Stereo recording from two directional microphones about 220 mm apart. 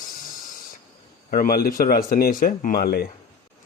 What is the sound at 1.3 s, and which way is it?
Speech, 40° left (ahead or behind).